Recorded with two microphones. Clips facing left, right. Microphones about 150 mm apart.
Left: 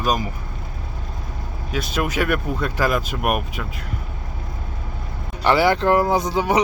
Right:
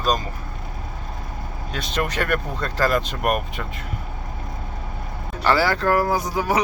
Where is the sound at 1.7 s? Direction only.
5° left (ahead or behind).